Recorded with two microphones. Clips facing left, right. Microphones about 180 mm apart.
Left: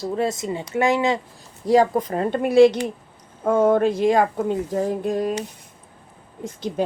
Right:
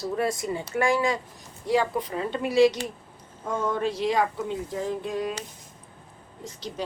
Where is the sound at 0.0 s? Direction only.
25° left (ahead or behind).